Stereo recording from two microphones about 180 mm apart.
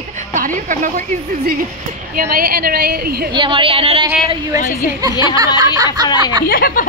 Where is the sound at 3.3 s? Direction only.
25° right (ahead or behind).